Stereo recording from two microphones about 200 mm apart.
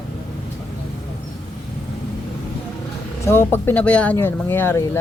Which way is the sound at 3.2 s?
10° left (ahead or behind).